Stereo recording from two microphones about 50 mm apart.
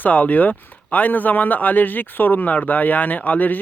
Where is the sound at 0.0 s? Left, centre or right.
Left.